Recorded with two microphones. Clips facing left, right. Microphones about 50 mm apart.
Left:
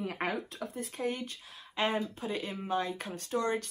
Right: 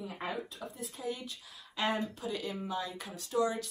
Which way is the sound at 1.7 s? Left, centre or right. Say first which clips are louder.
Left 2 dB; left.